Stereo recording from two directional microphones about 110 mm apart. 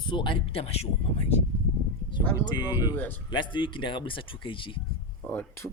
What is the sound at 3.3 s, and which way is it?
Speech, 45° left (ahead or behind).